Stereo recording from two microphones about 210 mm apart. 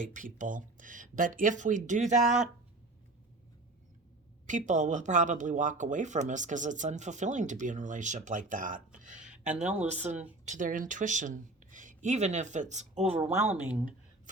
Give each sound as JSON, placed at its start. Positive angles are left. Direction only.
{"t": 0.1, "sound": "speech", "side_deg": -40}
{"t": 4.4, "sound": "speech", "side_deg": -35}
{"t": 10.1, "sound": "speech", "side_deg": -5}
{"t": 10.4, "sound": "speech", "side_deg": -35}